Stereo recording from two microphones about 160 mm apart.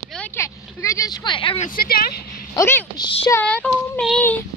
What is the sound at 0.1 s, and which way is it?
Vehicle, 10° left (ahead or behind).